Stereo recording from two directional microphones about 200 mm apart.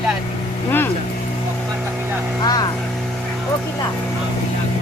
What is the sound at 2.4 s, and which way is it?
Speech, 20° left (ahead or behind).